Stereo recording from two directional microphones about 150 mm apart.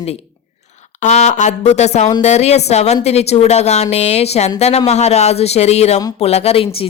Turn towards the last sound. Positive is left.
turn(degrees=40)  # may be behind; listen again after turning